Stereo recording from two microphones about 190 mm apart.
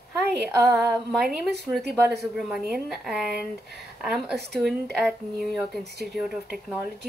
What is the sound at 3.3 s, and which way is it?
Speech, 55° right (ahead or behind).